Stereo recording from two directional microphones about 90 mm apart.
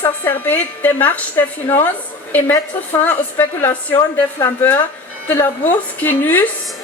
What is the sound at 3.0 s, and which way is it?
A woman's voice, 20° left (ahead or behind).